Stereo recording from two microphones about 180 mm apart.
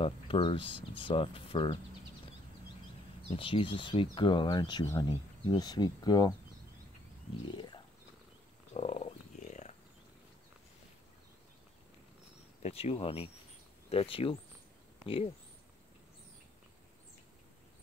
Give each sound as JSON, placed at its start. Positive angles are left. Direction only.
{"t": 0.0, "sound": "speech", "side_deg": 30}
{"t": 3.3, "sound": "speech", "side_deg": 30}
{"t": 7.5, "sound": "a sound", "side_deg": 25}
{"t": 8.7, "sound": "wild animals", "side_deg": 35}
{"t": 12.6, "sound": "speech", "side_deg": 35}